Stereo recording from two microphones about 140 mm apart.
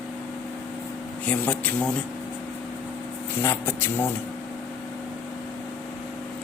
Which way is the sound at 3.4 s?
15° left (ahead or behind).